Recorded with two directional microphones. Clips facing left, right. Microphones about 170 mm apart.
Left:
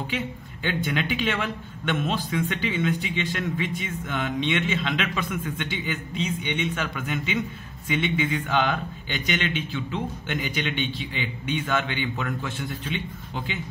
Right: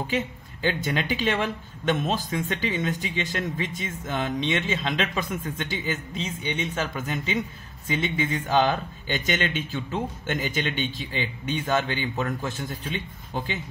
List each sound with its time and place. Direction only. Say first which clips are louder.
0.0 s speech: right 2 dB; 40° right (ahead or behind)